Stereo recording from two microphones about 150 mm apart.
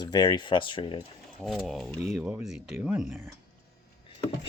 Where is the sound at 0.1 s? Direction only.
30° left (ahead or behind).